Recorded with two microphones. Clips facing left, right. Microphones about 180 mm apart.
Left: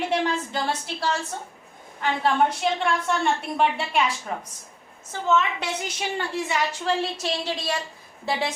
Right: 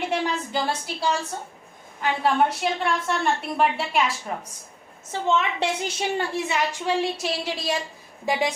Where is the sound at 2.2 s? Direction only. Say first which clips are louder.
Even; centre (ahead or behind).